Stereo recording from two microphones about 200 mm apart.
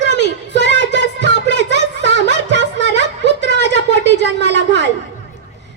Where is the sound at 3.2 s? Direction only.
60° left (ahead or behind).